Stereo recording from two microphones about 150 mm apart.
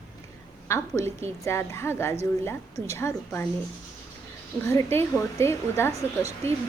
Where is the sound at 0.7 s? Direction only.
20° left (ahead or behind).